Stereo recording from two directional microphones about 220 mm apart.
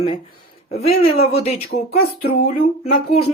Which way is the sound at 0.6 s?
30° left (ahead or behind).